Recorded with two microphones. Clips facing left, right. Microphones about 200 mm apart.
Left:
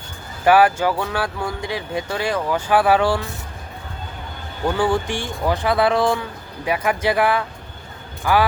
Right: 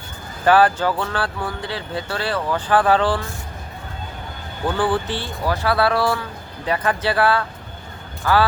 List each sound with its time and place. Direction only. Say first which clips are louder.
0.4 s speech: left 1 dB; 10° left (ahead or behind)
4.6 s speech: left 1 dB; 10° left (ahead or behind)